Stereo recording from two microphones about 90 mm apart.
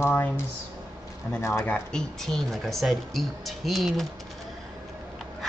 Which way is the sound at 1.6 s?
10° left (ahead or behind).